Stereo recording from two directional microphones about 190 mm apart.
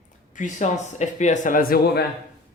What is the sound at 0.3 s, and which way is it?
Speech, 40° left (ahead or behind).